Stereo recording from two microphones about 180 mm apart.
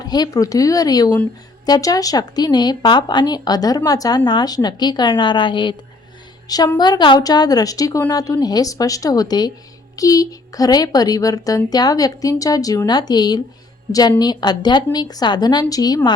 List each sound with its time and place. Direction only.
0.0 s speech: 20° left (ahead or behind)